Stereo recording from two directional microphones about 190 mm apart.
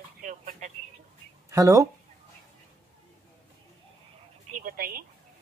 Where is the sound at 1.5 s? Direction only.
15° right (ahead or behind).